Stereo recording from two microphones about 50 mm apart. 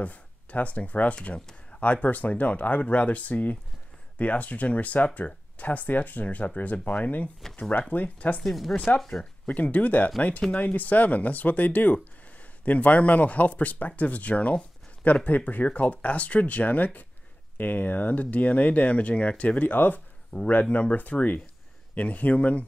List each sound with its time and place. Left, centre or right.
0.0 s speech: left
8.4 s speech: centre
8.7 s speech: left